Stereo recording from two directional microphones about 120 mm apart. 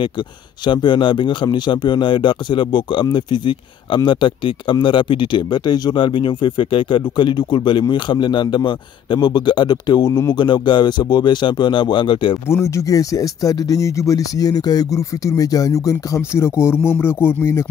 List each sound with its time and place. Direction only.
0.7 s speech: 40° left (ahead or behind)
12.4 s speech: 20° left (ahead or behind)